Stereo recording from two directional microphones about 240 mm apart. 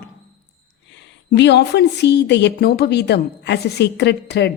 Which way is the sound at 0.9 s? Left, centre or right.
Left.